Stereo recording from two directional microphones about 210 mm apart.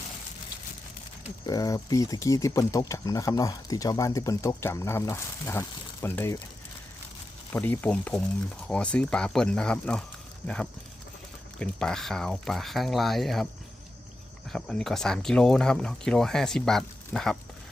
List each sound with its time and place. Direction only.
1.5 s speech: 15° left (ahead or behind)
7.5 s speech: 10° left (ahead or behind)
14.5 s speech: centre (ahead or behind)